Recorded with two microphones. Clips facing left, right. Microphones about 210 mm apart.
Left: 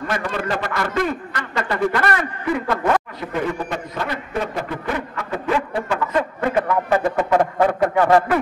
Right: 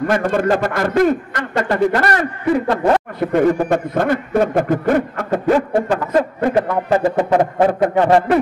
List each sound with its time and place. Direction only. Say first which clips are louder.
0.0 s a man's voice: right 8 dB; 50° right (ahead or behind)
3.2 s a man's voice: right 9 dB; 50° right (ahead or behind); by 8.4 s 25° right (ahead or behind)